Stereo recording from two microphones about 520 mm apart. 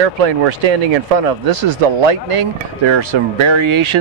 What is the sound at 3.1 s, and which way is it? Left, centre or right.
Speech, right.